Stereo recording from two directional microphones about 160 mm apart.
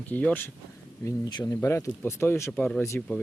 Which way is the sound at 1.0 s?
25° left (ahead or behind).